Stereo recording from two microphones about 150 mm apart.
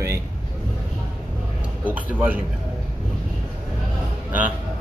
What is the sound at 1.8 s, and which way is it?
Speech, 10° right (ahead or behind).